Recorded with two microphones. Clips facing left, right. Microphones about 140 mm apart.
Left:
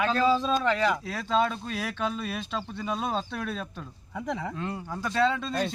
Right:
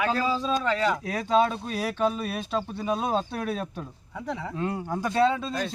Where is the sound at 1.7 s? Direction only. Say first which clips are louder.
Right 5 dB; 40° right (ahead or behind).